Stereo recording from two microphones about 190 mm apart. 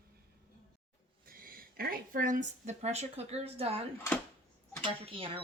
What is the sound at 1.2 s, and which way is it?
Speech, 50° right (ahead or behind).